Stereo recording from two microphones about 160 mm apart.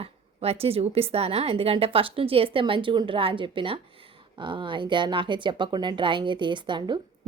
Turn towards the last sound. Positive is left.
turn(degrees=-30)  # may be behind; listen again after turning